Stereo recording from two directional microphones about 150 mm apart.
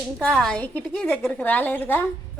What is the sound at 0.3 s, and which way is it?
A woman's voice, 5° left (ahead or behind).